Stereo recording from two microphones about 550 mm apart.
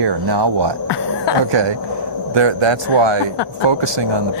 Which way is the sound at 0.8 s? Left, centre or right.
Left.